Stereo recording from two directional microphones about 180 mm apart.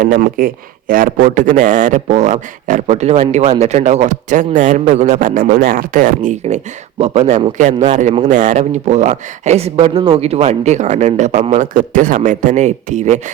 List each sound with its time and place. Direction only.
0.0 s a man's voice: 50° right (ahead or behind)